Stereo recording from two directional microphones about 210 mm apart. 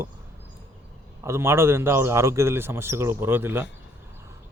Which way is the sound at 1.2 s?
10° right (ahead or behind).